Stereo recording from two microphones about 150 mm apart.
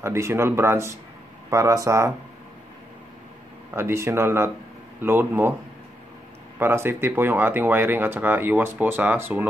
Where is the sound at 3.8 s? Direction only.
15° right (ahead or behind).